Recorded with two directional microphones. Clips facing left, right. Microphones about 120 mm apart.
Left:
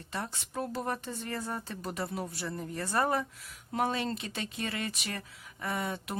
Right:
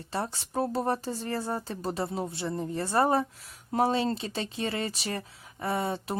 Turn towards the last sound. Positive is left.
turn(degrees=-30)  # may be behind; listen again after turning